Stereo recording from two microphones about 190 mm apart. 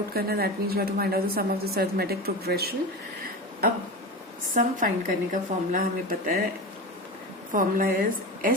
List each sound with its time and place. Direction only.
0.1 s a woman's voice: 55° right (ahead or behind)
4.5 s a woman's voice: 45° right (ahead or behind)
7.5 s a woman's voice: 45° right (ahead or behind)